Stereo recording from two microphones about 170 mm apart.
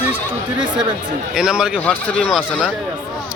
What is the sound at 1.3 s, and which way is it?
Speech, 5° right (ahead or behind).